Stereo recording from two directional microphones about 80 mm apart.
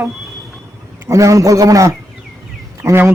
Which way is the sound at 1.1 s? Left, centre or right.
Right.